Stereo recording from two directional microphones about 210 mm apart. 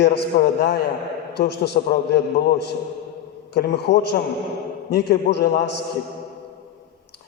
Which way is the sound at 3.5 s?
55° left (ahead or behind).